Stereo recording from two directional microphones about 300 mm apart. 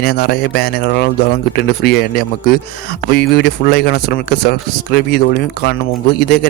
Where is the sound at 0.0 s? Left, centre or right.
Left.